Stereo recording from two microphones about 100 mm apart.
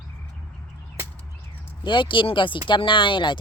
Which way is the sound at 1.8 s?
55° left (ahead or behind).